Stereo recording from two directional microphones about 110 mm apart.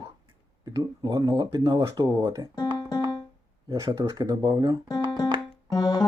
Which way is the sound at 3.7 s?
30° right (ahead or behind).